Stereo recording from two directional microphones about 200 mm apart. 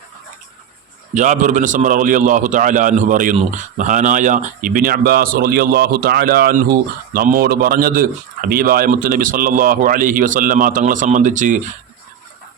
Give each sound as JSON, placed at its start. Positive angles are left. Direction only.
{"t": 1.1, "sound": "a man's voice", "side_deg": -40}